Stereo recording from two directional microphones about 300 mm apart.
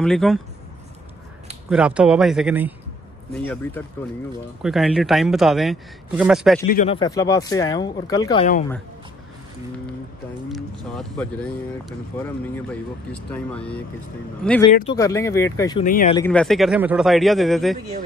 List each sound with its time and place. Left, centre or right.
0.0 s speech: centre
1.7 s speech: centre
3.8 s speech: centre
6.6 s speech: left
10.5 s speech: centre
15.8 s speech: left
16.2 s speech: centre